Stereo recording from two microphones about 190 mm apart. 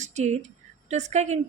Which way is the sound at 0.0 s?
40° right (ahead or behind).